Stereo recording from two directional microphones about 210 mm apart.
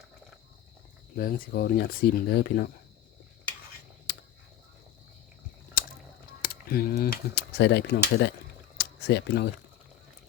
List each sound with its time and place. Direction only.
1.1 s speech: 45° left (ahead or behind)
5.8 s a sound: 40° left (ahead or behind)
6.4 s speech: 45° left (ahead or behind)